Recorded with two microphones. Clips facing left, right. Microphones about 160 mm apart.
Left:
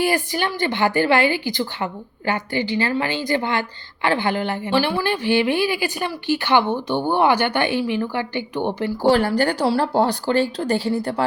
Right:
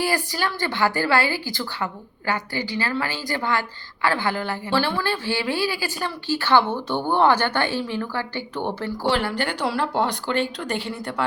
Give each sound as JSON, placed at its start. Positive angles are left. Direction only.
{"t": 0.0, "sound": "a woman's voice", "side_deg": 20}
{"t": 9.0, "sound": "speech", "side_deg": 40}